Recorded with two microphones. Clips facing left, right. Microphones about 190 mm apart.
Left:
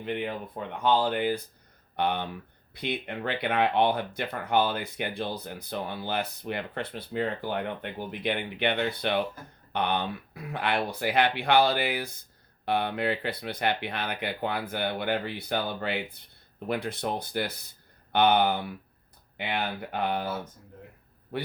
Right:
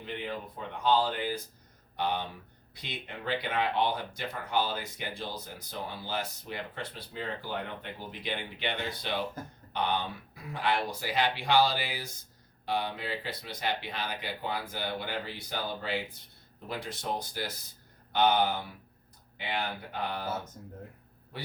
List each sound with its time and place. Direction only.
0.0 s speech: 60° left (ahead or behind)
21.3 s a man's voice: 60° left (ahead or behind)